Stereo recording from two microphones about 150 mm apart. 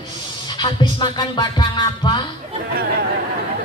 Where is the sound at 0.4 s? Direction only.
30° left (ahead or behind).